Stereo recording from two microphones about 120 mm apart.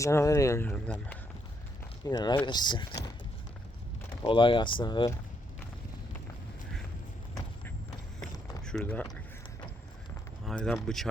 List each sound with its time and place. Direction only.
0.0 s speech: 25° left (ahead or behind)
0.7 s speech: 10° left (ahead or behind)
2.0 s speech: 35° left (ahead or behind)
4.2 s speech: 45° left (ahead or behind)
8.6 s speech: 10° left (ahead or behind)
10.4 s speech: 5° left (ahead or behind)